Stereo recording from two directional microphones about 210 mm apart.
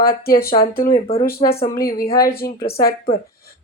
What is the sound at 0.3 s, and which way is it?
Speech, 45° left (ahead or behind).